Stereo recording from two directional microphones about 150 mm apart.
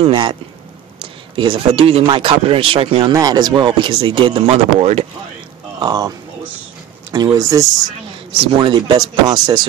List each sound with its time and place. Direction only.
0.0 s speech: 35° right (ahead or behind)
3.1 s speech: 25° right (ahead or behind); by 5.0 s 45° right (ahead or behind)
5.8 s speech: 25° right (ahead or behind)